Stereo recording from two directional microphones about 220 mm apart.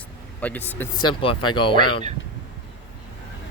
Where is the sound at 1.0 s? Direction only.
20° left (ahead or behind).